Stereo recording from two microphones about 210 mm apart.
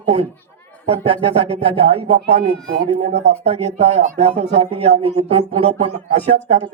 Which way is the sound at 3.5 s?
30° right (ahead or behind).